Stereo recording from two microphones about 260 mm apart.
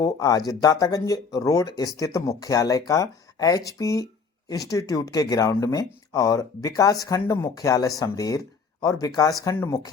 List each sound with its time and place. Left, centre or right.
0.0 s speech: centre